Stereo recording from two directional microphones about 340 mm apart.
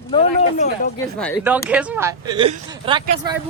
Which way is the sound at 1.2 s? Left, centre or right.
Centre.